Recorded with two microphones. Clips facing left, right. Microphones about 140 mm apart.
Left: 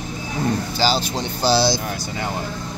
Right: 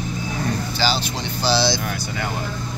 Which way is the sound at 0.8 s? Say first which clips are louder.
Left 3 dB; 40° left (ahead or behind).